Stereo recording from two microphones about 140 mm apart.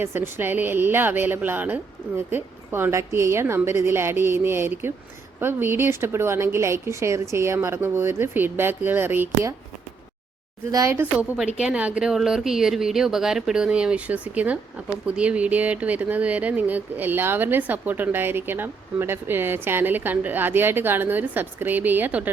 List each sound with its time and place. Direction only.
0.0 s speech: 15° right (ahead or behind)
10.7 s speech: 20° right (ahead or behind)